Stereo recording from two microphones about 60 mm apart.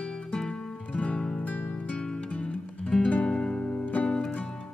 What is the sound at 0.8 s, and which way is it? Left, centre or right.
Music, left.